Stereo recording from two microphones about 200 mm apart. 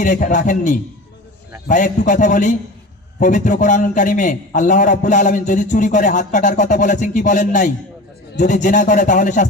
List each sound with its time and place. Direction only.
0.0 s a man's voice: 40° left (ahead or behind)